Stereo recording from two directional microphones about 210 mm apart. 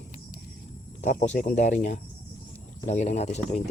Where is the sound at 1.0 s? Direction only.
35° left (ahead or behind).